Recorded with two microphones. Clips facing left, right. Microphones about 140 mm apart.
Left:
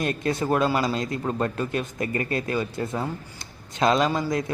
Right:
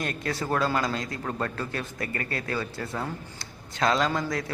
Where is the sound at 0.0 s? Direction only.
20° left (ahead or behind).